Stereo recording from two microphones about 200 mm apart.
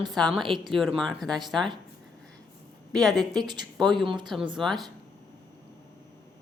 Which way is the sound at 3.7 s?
Centre (ahead or behind).